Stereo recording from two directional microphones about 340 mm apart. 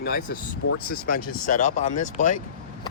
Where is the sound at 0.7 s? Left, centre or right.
Left.